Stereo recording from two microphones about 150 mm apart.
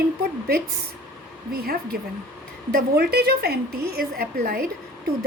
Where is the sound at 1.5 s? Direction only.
90° right.